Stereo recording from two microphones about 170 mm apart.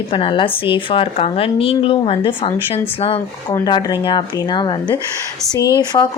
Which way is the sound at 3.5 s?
25° left (ahead or behind).